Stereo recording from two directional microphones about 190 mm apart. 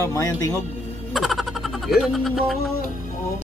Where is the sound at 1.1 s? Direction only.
Centre (ahead or behind).